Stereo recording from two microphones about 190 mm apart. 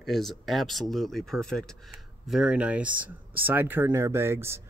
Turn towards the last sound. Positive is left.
turn(degrees=-10)  # may be behind; listen again after turning